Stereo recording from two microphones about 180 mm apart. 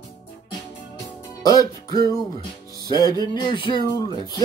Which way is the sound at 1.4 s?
20° left (ahead or behind).